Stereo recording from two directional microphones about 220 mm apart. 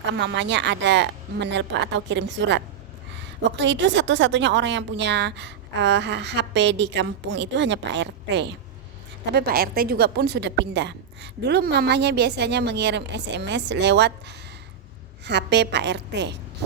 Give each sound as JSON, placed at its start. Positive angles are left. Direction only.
{"t": 0.1, "sound": "a woman's voice", "side_deg": -55}